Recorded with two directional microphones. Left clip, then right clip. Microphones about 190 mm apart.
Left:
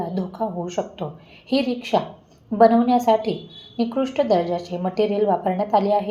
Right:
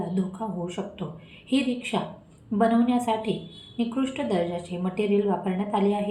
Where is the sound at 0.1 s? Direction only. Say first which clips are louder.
Left 5 dB; 25° left (ahead or behind).